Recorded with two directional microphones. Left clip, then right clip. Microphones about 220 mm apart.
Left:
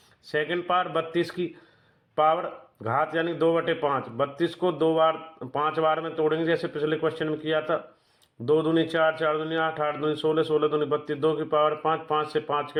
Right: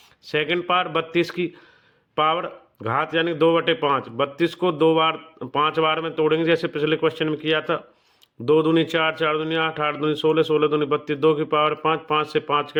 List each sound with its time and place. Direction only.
0.3 s speech: 25° right (ahead or behind)